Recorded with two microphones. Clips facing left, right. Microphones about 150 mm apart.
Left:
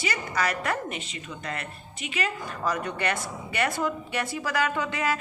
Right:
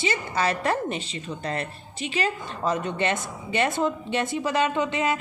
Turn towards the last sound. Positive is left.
turn(degrees=-20)  # may be behind; listen again after turning